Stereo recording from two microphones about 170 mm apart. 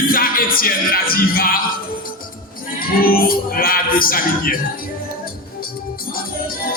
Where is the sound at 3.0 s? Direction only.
60° left (ahead or behind).